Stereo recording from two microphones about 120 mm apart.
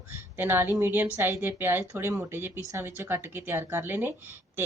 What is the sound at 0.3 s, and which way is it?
A woman's voice, 15° right (ahead or behind).